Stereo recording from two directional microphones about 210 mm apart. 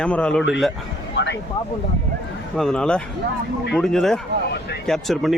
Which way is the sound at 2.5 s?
Centre (ahead or behind).